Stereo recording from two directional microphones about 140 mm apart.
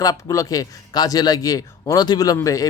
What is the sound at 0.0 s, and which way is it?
Speech, 25° left (ahead or behind).